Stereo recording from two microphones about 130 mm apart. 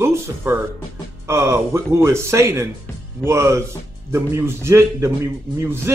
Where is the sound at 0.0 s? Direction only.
20° right (ahead or behind).